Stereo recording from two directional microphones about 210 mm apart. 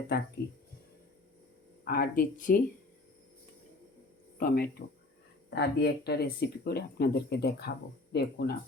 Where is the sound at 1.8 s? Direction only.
45° left (ahead or behind).